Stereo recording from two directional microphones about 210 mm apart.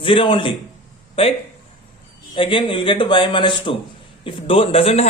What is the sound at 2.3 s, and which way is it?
Speech, 25° left (ahead or behind).